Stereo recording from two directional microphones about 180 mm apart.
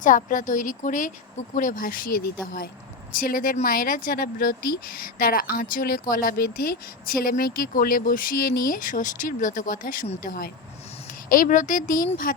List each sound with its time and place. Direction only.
0.0 s speech: 45° left (ahead or behind)